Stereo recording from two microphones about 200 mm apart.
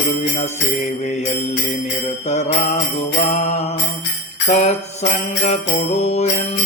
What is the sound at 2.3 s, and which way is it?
Jingle bell, 35° left (ahead or behind).